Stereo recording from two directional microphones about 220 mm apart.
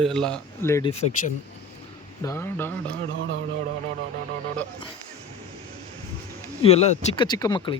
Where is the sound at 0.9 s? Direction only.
30° left (ahead or behind).